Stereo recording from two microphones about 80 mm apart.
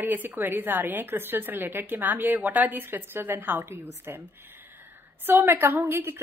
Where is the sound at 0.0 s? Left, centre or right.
Right.